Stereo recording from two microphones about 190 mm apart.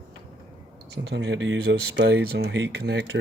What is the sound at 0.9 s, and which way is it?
Speech, 65° right (ahead or behind).